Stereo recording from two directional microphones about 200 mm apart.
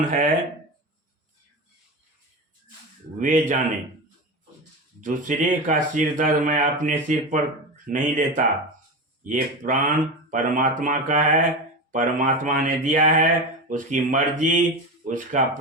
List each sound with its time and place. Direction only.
0.0 s speech: 40° right (ahead or behind)
3.2 s speech: 40° right (ahead or behind)
4.9 s speech: 40° right (ahead or behind)